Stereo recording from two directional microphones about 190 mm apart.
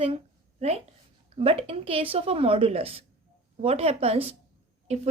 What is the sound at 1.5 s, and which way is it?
Speech, 30° right (ahead or behind).